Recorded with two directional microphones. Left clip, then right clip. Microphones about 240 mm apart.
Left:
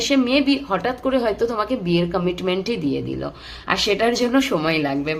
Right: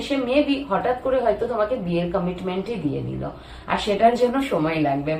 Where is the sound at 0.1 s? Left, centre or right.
Left.